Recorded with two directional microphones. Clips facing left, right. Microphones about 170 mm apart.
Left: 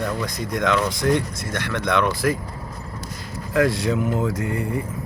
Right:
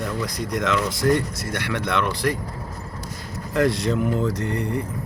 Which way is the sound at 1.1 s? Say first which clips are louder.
Even; 50° left (ahead or behind).